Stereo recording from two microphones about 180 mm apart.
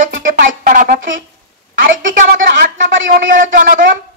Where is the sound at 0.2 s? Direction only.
50° right (ahead or behind).